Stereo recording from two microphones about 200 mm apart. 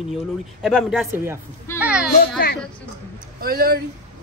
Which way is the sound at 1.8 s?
5° right (ahead or behind).